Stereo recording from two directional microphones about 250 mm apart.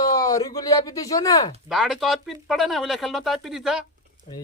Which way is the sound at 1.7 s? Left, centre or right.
Centre.